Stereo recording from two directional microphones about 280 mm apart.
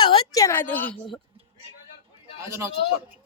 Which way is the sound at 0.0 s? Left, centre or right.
Centre.